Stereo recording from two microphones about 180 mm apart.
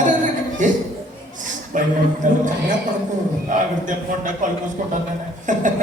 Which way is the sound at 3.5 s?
45° right (ahead or behind).